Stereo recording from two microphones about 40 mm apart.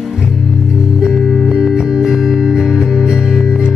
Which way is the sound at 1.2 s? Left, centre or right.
Centre.